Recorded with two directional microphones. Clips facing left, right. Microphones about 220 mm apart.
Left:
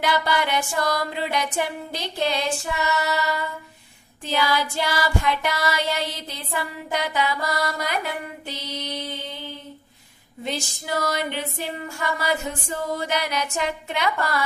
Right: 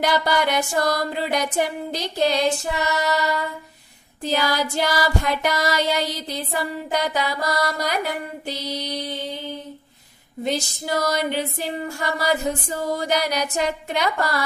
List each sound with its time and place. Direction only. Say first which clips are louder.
0.0 s music: right 3 dB; 45° right (ahead or behind)
4.2 s music: right 1 dB; 40° right (ahead or behind)
10.4 s music: right 5 dB; 40° right (ahead or behind)